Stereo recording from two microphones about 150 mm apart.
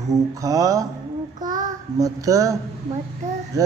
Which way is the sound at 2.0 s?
20° right (ahead or behind).